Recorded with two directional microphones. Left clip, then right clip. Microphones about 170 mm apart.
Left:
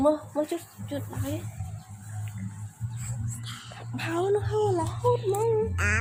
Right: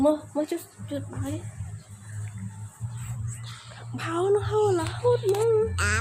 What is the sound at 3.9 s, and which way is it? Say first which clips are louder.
Speech: right 2 dB; 10° right (ahead or behind).